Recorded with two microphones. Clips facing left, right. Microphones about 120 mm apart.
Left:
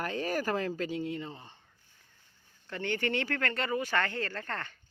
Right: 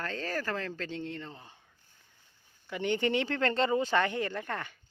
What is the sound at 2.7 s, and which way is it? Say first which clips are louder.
Speech: right 3 dB; 15° right (ahead or behind).